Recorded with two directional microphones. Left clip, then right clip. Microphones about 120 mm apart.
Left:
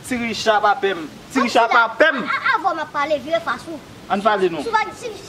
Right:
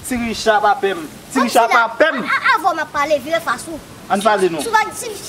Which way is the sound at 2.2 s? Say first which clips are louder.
Right 4 dB; 15° right (ahead or behind).